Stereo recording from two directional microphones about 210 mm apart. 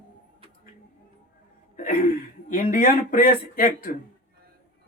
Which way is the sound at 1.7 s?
40° left (ahead or behind).